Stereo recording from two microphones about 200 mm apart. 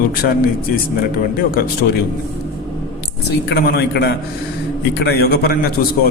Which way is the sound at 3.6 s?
55° left (ahead or behind).